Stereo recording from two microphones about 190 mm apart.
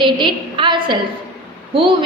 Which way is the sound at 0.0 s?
25° right (ahead or behind).